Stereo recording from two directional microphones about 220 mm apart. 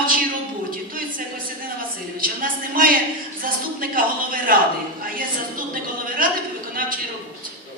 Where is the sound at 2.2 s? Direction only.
40° right (ahead or behind).